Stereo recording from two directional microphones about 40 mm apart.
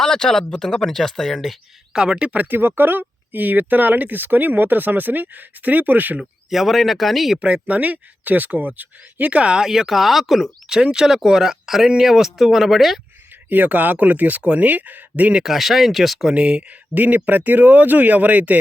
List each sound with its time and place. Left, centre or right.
0.0 s speech: centre
1.9 s speech: centre
2.3 s speech: right
2.6 s speech: right
6.5 s speech: centre
7.3 s speech: right
9.6 s speech: centre
10.9 s speech: centre
13.5 s speech: right
15.4 s speech: centre
16.3 s speech: right
16.9 s speech: right